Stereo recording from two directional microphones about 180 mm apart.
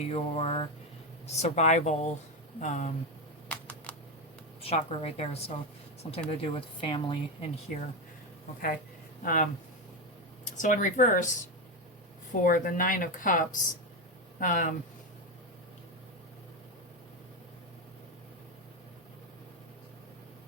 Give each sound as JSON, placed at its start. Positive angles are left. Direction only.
{"t": 0.0, "sound": "speech", "side_deg": 35}
{"t": 3.5, "sound": "a sound", "side_deg": 10}
{"t": 4.6, "sound": "speech", "side_deg": 35}
{"t": 9.2, "sound": "speech", "side_deg": 50}
{"t": 12.3, "sound": "speech", "side_deg": 50}